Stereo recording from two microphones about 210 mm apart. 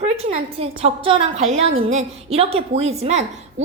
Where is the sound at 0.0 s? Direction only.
30° right (ahead or behind).